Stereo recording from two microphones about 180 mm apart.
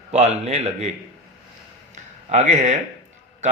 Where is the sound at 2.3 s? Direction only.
40° right (ahead or behind).